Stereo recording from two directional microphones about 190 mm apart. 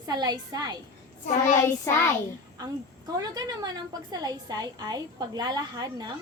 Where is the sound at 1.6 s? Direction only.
15° left (ahead or behind).